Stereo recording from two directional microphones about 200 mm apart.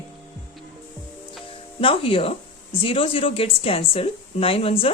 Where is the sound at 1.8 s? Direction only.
25° left (ahead or behind).